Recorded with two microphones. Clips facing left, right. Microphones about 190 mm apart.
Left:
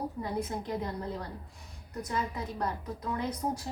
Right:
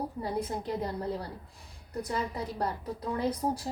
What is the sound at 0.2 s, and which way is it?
Speech, 35° right (ahead or behind).